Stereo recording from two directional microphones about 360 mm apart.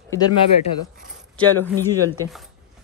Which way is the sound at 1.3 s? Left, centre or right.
Centre.